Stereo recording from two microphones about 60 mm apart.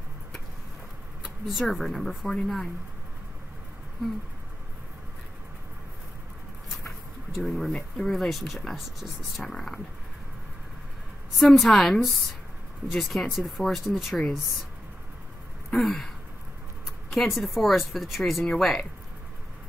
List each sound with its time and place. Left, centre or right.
1.2 s speech: centre
7.4 s speech: centre
11.3 s speech: centre
15.7 s speech: centre
17.1 s speech: centre